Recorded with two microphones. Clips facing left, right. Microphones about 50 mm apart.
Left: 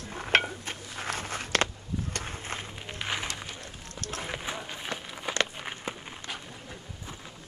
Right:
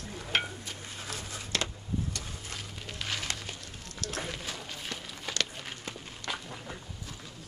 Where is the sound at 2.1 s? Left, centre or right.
Left.